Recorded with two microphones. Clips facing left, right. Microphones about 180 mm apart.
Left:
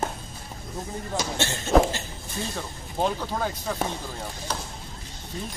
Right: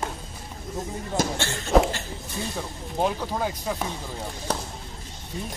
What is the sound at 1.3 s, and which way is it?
Speech, 20° left (ahead or behind).